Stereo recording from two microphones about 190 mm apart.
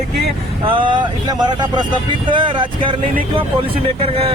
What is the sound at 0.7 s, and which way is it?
Speech, 25° right (ahead or behind).